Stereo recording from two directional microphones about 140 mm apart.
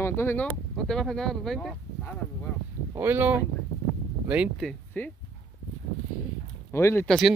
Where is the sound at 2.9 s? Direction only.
15° right (ahead or behind).